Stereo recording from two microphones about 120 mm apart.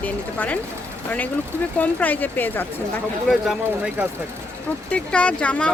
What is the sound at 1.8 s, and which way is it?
Speech, 15° left (ahead or behind).